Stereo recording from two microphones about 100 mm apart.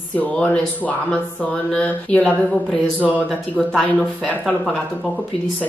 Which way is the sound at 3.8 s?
15° left (ahead or behind).